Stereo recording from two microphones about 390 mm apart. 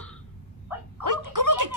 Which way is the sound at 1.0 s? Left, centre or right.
Right.